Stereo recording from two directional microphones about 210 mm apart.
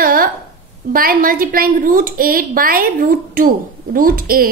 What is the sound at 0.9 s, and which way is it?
A woman's voice, 45° right (ahead or behind).